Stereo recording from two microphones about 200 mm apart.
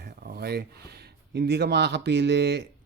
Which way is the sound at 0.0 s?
50° right (ahead or behind).